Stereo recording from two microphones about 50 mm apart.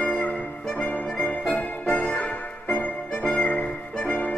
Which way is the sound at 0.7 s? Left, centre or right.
Left.